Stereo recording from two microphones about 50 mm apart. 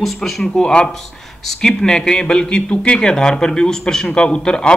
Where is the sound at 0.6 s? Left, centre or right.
Centre.